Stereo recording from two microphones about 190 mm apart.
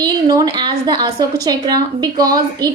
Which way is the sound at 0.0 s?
20° right (ahead or behind).